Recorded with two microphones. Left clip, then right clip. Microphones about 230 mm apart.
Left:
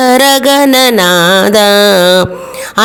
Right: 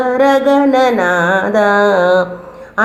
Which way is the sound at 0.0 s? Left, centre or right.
Left.